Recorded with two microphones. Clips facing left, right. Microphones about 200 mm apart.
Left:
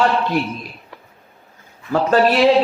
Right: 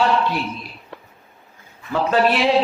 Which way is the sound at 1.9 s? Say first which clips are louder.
Left 3 dB; 40° left (ahead or behind).